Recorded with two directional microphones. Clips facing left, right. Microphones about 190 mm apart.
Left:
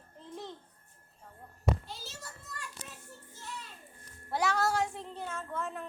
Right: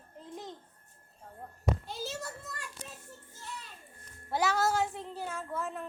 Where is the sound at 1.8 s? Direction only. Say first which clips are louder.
Right 8 dB; 60° right (ahead or behind).